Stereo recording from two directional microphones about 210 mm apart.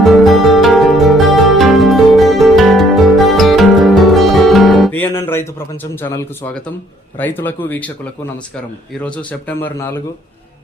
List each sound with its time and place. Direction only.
0.0 s music: centre (ahead or behind)
7.2 s a man's voice: 10° left (ahead or behind)
9.0 s a man's voice: 5° left (ahead or behind)